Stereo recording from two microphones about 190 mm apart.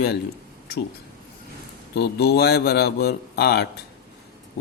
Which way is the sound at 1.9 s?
55° left (ahead or behind).